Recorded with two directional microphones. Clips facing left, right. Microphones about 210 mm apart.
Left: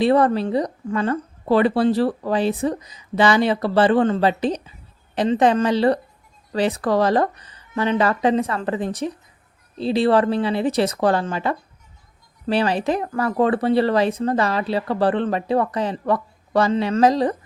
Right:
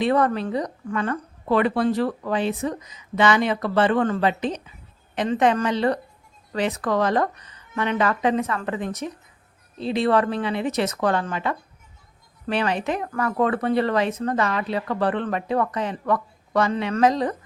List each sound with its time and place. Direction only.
0.0 s speech: 30° left (ahead or behind)